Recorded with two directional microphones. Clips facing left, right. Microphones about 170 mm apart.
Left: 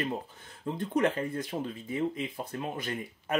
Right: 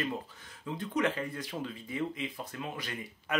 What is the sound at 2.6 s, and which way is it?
Speech, 40° left (ahead or behind).